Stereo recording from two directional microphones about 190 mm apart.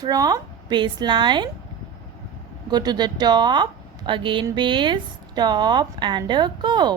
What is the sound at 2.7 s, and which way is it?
Speech, 20° right (ahead or behind).